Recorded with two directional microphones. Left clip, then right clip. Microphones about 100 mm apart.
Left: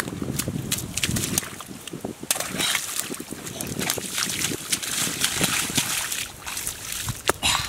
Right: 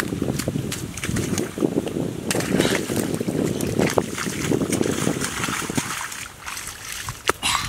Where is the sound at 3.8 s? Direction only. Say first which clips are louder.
Right 5 dB; 15° left (ahead or behind).